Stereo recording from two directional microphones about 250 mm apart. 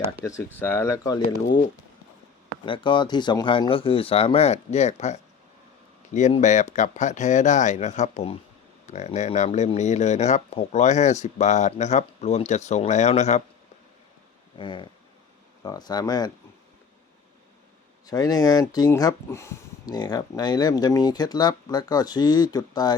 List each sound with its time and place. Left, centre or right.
0.2 s speech: centre
2.6 s speech: centre
14.6 s speech: centre
18.0 s speech: centre